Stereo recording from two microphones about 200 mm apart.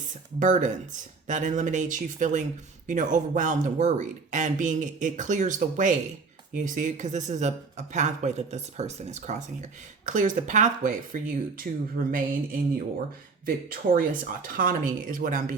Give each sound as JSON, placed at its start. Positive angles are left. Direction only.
{"t": 0.1, "sound": "speech", "side_deg": -40}